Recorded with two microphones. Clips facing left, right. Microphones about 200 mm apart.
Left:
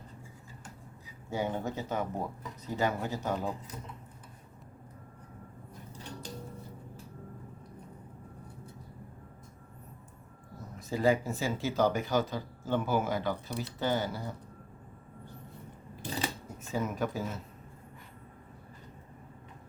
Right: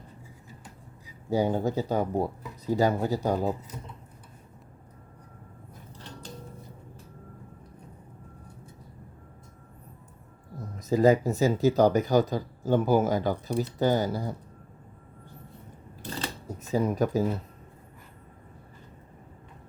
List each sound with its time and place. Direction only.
1.3 s speech: 35° right (ahead or behind)
10.8 s speech: 40° right (ahead or behind)
16.0 s scissors: 15° left (ahead or behind)
16.5 s speech: 40° right (ahead or behind)